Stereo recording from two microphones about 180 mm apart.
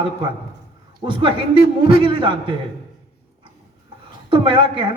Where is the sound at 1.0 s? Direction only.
25° right (ahead or behind).